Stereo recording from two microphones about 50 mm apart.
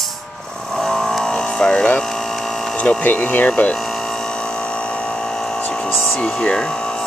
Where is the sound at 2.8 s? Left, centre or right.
Left.